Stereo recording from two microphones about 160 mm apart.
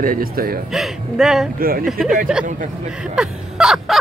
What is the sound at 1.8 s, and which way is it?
Speech, centre (ahead or behind).